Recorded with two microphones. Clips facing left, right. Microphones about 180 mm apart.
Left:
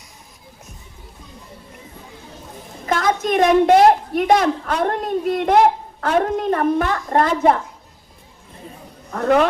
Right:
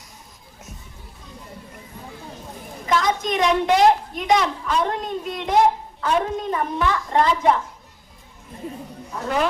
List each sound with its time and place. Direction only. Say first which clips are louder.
2.9 s a sound: left 2 dB; 55° left (ahead or behind)
3.2 s a woman's voice: left 9 dB; 50° left (ahead or behind)
9.1 s a woman's voice: left 7 dB; 60° left (ahead or behind)